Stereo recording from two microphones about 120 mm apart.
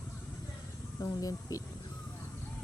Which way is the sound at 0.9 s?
30° left (ahead or behind).